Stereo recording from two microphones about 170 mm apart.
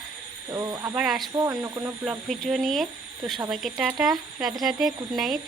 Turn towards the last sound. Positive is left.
turn(degrees=0)  # may be behind; listen again after turning